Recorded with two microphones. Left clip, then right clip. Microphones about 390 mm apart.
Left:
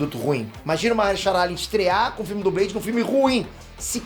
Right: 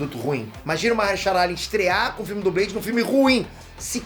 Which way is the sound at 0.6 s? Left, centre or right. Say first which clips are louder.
Left 1 dB; centre.